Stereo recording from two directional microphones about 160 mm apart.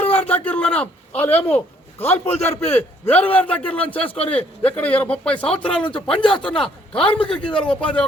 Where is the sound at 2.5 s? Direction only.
10° left (ahead or behind).